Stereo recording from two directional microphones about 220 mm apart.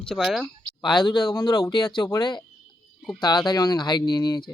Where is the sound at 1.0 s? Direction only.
20° left (ahead or behind).